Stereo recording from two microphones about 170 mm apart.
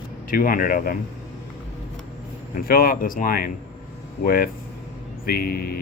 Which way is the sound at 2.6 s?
60° left (ahead or behind).